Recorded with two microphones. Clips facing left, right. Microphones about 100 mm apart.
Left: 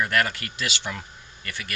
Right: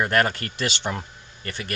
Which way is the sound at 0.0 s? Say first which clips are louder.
Right 3 dB; 35° right (ahead or behind).